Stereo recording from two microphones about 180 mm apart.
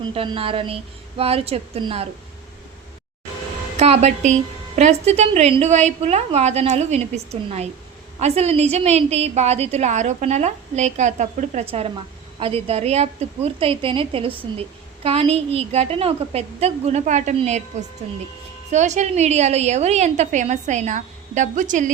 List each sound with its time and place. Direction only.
0.1 s a woman's voice: 30° right (ahead or behind)
3.8 s a woman's voice: 35° right (ahead or behind)
8.2 s a woman's voice: 35° right (ahead or behind)